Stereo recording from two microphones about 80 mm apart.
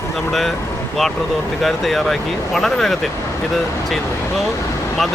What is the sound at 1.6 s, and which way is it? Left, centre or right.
Speech, centre.